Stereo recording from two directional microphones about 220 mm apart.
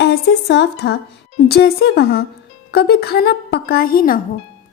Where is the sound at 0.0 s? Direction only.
50° left (ahead or behind).